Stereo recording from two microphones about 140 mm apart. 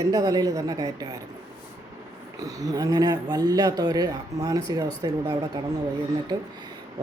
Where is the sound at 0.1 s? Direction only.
25° right (ahead or behind).